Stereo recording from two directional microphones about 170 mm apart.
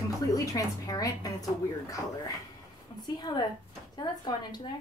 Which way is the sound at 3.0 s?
25° left (ahead or behind).